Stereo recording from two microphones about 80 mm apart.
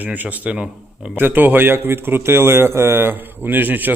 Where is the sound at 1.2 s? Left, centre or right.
Right.